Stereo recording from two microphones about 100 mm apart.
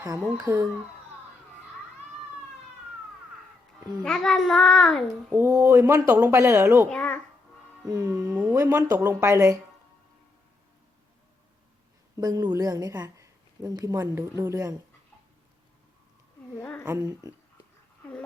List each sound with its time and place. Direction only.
0.0 s a woman's voice: 35° right (ahead or behind)
4.0 s a child's voice: 5° left (ahead or behind)
5.3 s speech: 25° right (ahead or behind)
6.9 s a child's voice: 15° left (ahead or behind)
7.9 s a woman's voice: 35° right (ahead or behind)
8.3 s speech: 20° right (ahead or behind)
8.5 s speech: 30° right (ahead or behind)
12.1 s a woman's voice: 40° right (ahead or behind)
16.6 s speech: 20° left (ahead or behind)
16.8 s a woman's voice: 30° right (ahead or behind)